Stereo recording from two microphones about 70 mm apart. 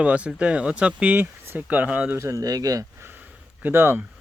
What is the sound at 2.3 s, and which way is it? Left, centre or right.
Speech, right.